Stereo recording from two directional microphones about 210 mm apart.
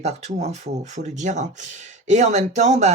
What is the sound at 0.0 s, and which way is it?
Speech, 30° right (ahead or behind).